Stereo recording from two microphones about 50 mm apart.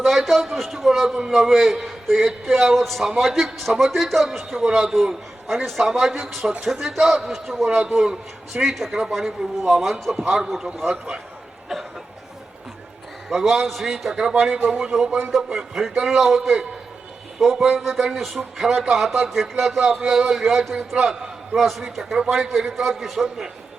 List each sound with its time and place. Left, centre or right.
0.0 s a man's voice: centre
1.0 s a man's voice: centre
9.4 s speech: centre
13.3 s a man's voice: centre